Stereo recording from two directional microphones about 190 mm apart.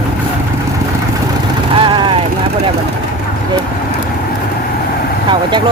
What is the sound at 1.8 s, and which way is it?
Vehicle, 25° right (ahead or behind).